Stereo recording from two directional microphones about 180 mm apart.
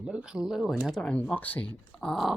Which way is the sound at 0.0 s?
5° right (ahead or behind).